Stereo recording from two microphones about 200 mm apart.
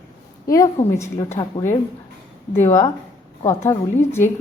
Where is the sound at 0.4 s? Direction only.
15° left (ahead or behind).